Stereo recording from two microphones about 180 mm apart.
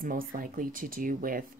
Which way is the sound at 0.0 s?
50° right (ahead or behind).